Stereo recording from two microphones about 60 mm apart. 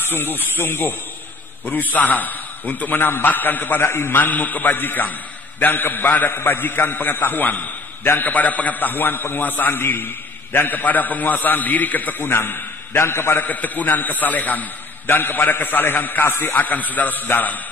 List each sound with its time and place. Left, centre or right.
0.0 s a man's voice: left
12.9 s a man's voice: left
13.4 s a man's voice: left